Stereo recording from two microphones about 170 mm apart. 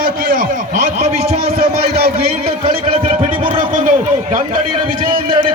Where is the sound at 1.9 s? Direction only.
65° right (ahead or behind).